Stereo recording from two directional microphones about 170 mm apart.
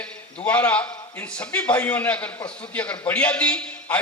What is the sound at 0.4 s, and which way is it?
Speech, 10° left (ahead or behind).